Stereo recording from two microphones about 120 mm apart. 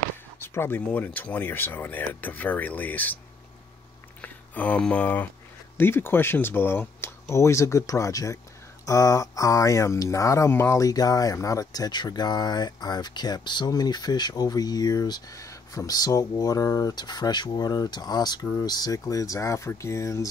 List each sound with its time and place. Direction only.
0.4 s speech: 15° left (ahead or behind)
4.2 s speech: 10° left (ahead or behind)